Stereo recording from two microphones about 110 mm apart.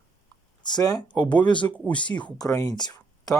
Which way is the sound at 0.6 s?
40° left (ahead or behind).